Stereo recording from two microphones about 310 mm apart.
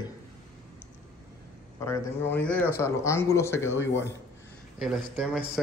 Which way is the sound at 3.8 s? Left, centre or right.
Left.